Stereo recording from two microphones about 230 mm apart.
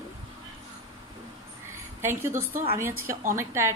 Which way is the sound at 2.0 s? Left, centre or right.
Centre.